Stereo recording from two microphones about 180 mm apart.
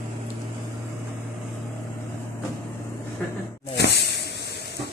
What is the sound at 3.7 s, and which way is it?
Hiss, 70° left (ahead or behind).